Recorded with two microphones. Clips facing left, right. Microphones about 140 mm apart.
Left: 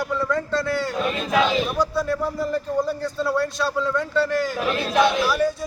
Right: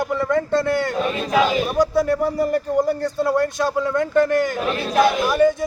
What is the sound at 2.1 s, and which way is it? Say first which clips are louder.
Speech: right 5 dB; 55° right (ahead or behind).